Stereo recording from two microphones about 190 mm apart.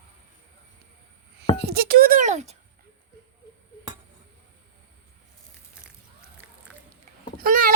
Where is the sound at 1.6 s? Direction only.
55° right (ahead or behind); by 2.6 s 35° right (ahead or behind).